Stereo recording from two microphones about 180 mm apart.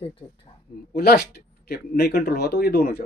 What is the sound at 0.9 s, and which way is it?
Speech, 60° left (ahead or behind).